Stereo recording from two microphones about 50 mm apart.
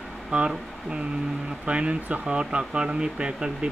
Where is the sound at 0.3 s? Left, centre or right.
Centre.